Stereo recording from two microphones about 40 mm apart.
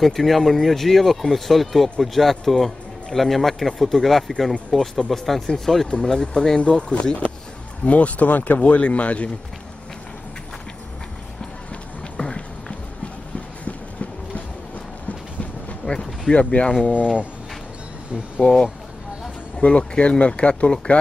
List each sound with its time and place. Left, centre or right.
0.0 s speech: centre
5.9 s speech: centre
6.6 s speech: left
12.2 s run: left
15.8 s a sound: left
16.8 s speech: left
18.4 s speech: centre
19.6 s speech: left